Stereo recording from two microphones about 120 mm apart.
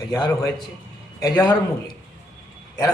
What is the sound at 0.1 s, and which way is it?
A man's voice, 30° left (ahead or behind).